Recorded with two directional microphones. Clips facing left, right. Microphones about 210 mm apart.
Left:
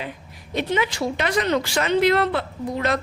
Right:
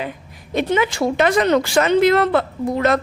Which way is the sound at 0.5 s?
50° right (ahead or behind).